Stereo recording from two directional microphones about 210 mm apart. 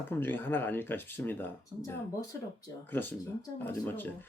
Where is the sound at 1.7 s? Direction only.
20° right (ahead or behind).